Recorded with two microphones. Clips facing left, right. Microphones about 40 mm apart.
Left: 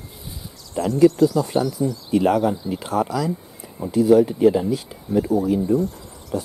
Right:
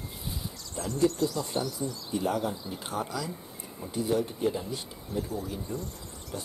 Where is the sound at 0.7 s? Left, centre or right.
Left.